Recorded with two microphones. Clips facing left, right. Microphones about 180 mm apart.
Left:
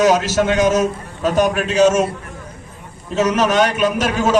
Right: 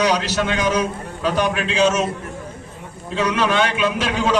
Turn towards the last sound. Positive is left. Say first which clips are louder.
# left 3 dB
turn(degrees=45)  # may be behind; listen again after turning